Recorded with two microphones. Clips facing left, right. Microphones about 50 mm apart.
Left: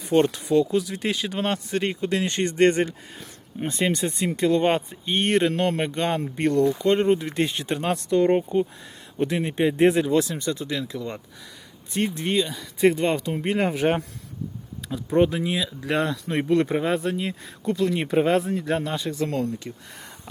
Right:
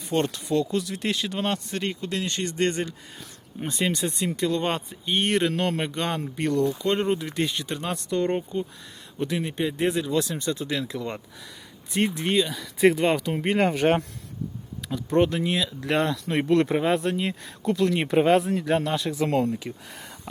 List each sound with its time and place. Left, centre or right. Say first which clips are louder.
0.0 s speech: left 5 dB; centre
1.8 s speech: left 4 dB; left
3.2 s speech: left 5 dB; centre
7.6 s speech: left 5 dB; left
8.1 s speech: left 6 dB; centre
9.6 s speech: left 7 dB; left
10.6 s speech: even; centre
12.1 s speech: even; centre
13.6 s speech: right 2 dB; centre
15.1 s speech: left 1 dB; centre
19.2 s speech: right 3 dB; centre